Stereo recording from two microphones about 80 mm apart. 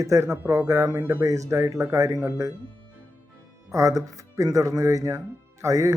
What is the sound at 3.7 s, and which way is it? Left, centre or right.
Speech, right.